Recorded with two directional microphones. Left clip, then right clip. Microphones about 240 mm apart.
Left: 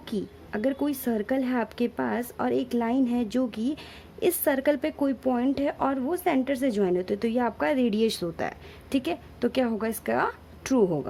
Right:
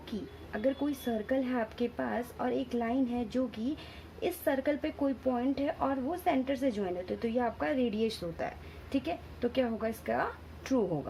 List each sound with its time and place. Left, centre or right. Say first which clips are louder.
0.5 s a woman's voice: left 4 dB; left